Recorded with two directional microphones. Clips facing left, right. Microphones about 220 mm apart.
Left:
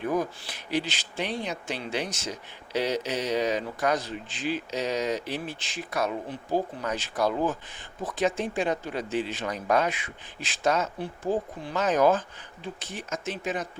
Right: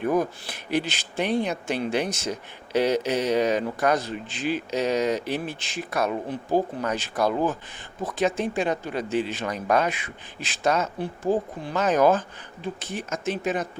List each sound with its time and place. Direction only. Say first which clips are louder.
0.0 s speech: right 4 dB; 55° right (ahead or behind)